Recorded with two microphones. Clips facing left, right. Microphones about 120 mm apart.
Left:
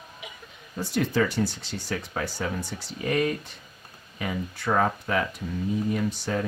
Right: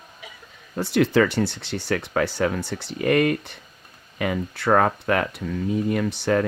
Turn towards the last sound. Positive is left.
turn(degrees=-70)  # may be behind; listen again after turning